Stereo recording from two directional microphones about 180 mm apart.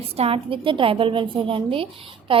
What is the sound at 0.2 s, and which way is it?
A woman's voice, 30° right (ahead or behind).